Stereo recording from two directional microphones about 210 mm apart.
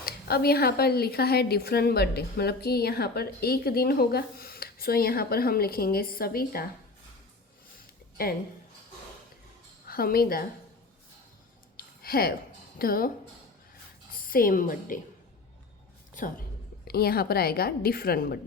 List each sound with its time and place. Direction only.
0.0 s speech: 50° left (ahead or behind)
8.2 s speech: 45° left (ahead or behind)
9.8 s a woman's voice: 45° left (ahead or behind)
11.8 s a sound: 45° left (ahead or behind)
12.8 s speech: 45° left (ahead or behind)
14.1 s a woman's voice: 45° left (ahead or behind)
16.8 s speech: 45° left (ahead or behind)